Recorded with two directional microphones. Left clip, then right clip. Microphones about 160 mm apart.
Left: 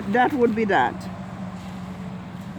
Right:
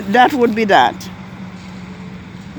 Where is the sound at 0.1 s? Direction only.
40° right (ahead or behind).